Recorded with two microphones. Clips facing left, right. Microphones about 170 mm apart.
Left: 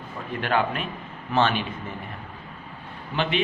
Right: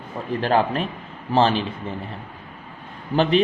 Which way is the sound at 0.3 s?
35° right (ahead or behind).